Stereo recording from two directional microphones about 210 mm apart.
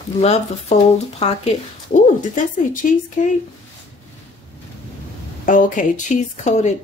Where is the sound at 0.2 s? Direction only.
30° left (ahead or behind).